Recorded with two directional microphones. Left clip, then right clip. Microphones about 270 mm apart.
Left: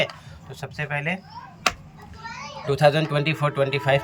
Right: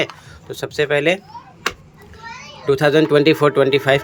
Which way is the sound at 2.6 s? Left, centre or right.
Centre.